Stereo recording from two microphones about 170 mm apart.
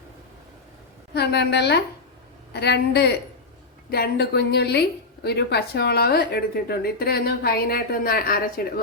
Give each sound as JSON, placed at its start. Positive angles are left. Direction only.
{"t": 1.1, "sound": "speech", "side_deg": 75}